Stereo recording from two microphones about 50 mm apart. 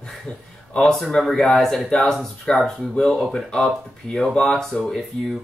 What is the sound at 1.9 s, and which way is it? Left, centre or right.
Speech, centre.